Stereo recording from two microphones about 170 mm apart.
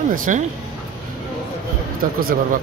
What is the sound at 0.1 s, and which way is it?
Speech, 50° right (ahead or behind).